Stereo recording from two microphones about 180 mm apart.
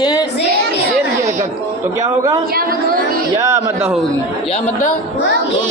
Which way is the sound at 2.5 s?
55° right (ahead or behind).